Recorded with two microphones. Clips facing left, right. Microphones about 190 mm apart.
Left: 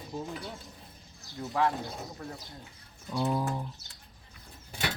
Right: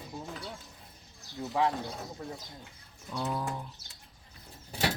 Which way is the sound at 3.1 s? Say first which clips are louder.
Left 4 dB; 15° left (ahead or behind).